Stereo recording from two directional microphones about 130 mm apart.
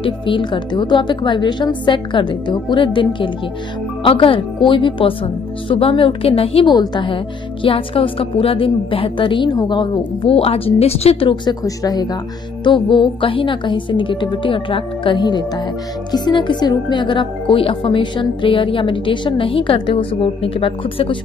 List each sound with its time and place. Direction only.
0.0 s a woman's voice: 40° left (ahead or behind)
11.6 s speech: 30° left (ahead or behind)